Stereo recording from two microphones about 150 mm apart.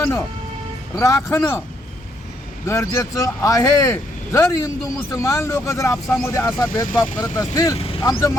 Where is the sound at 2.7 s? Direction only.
20° left (ahead or behind).